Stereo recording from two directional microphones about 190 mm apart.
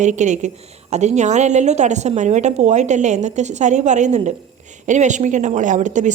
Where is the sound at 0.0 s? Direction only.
40° right (ahead or behind).